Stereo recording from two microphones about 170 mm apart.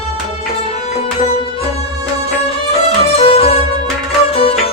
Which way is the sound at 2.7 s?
35° left (ahead or behind).